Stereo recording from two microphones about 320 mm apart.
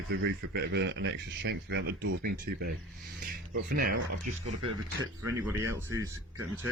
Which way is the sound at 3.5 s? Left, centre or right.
Right.